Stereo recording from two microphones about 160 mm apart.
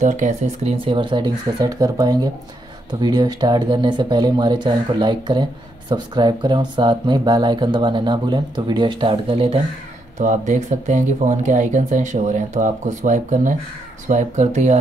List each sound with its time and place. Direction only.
0.0 s speech: 50° right (ahead or behind); by 9.6 s 35° right (ahead or behind)
10.1 s speech: 50° right (ahead or behind)